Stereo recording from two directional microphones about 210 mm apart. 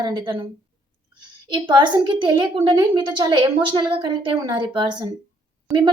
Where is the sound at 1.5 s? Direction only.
20° right (ahead or behind).